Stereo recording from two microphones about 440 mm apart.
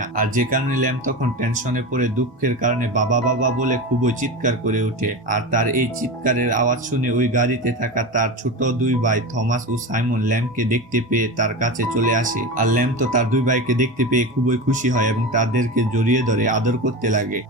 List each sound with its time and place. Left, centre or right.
0.2 s speech: centre